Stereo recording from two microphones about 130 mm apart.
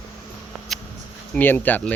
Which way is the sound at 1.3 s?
15° left (ahead or behind).